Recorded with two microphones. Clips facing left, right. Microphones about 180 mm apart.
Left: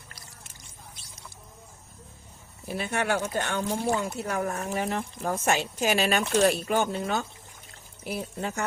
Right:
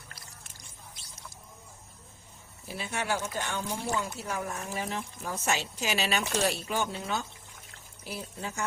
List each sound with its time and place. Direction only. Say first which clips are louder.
2.6 s speech: left 5 dB; 55° left (ahead or behind)